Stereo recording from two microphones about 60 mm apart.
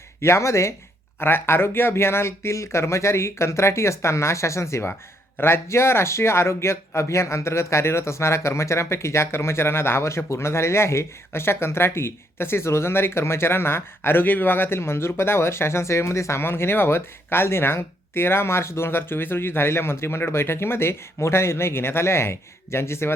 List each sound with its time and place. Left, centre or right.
0.2 s speech: left
1.2 s speech: left